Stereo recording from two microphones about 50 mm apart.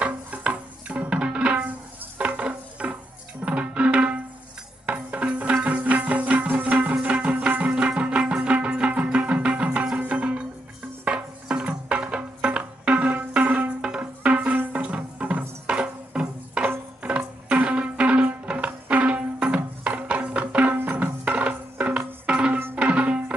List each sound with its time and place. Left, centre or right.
0.0 s music: right
20.7 s music: right